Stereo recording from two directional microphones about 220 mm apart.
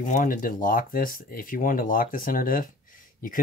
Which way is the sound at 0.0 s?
35° left (ahead or behind).